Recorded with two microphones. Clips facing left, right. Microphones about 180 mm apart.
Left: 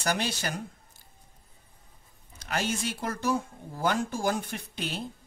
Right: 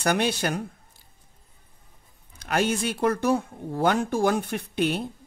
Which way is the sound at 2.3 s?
60° right (ahead or behind).